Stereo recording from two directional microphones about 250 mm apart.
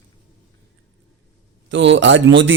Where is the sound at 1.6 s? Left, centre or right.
Right.